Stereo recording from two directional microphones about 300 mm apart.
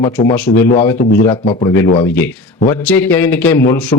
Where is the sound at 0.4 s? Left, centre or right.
Left.